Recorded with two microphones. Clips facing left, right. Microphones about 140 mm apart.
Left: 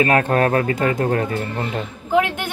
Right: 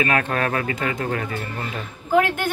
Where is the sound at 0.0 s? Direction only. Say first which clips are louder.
Left 5 dB; 35° left (ahead or behind).